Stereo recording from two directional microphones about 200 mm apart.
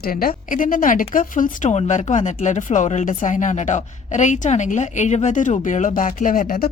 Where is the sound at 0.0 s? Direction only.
45° left (ahead or behind).